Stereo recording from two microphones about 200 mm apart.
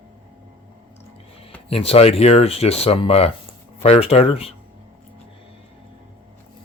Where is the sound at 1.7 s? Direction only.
30° left (ahead or behind).